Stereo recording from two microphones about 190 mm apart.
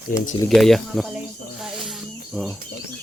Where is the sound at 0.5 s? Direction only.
Centre (ahead or behind).